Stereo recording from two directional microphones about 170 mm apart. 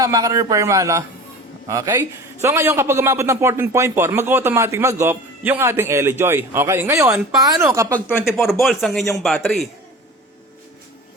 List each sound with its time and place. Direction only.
0.0 s a man's voice: 20° right (ahead or behind)
8.6 s a man's voice: centre (ahead or behind)